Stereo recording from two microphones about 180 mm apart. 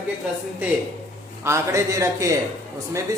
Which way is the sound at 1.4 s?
15° right (ahead or behind).